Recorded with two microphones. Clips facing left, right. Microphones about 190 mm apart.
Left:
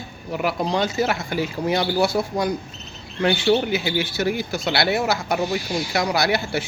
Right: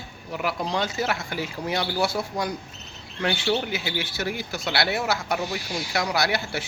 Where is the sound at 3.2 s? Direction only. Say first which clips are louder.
Left 6 dB; 20° left (ahead or behind).